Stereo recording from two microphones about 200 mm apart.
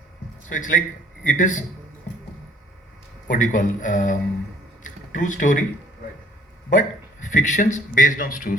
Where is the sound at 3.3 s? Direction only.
40° left (ahead or behind).